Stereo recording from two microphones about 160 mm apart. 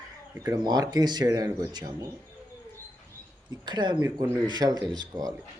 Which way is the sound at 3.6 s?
30° right (ahead or behind).